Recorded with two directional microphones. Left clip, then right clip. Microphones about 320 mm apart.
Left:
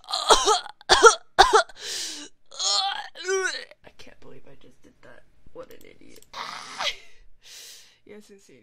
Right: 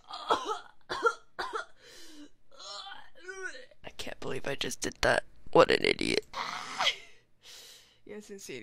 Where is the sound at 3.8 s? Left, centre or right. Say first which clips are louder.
Right 9 dB; centre.